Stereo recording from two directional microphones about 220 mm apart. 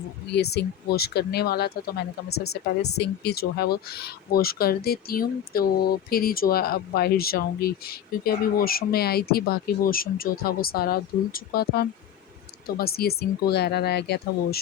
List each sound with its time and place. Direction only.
0.3 s speech: 45° left (ahead or behind)